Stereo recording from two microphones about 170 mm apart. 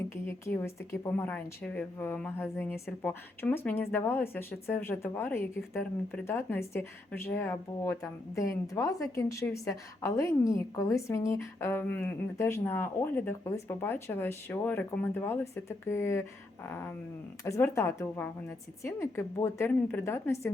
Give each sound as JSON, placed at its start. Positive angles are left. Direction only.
{"t": 0.3, "sound": "speech", "side_deg": 15}